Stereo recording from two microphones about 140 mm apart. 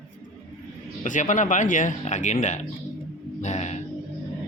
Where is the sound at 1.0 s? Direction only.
65° left (ahead or behind).